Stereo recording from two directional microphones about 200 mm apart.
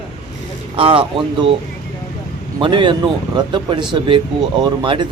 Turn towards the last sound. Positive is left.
turn(degrees=-25)  # may be behind; listen again after turning